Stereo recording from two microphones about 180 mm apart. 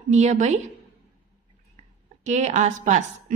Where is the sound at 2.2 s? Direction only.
40° right (ahead or behind).